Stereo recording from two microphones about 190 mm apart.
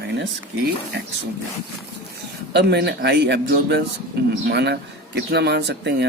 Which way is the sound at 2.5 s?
60° right (ahead or behind).